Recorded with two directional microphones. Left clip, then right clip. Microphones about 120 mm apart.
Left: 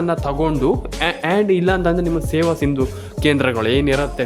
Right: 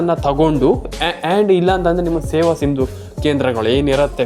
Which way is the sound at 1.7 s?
15° left (ahead or behind).